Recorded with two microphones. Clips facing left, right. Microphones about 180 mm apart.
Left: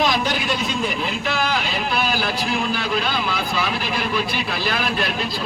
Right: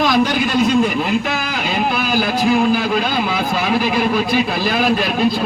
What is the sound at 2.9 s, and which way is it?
Speech, 50° right (ahead or behind).